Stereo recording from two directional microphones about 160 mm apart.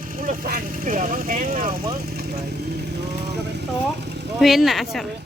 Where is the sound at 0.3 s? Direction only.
60° right (ahead or behind).